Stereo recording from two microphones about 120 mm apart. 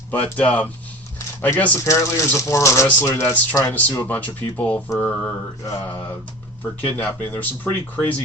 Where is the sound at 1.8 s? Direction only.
25° left (ahead or behind).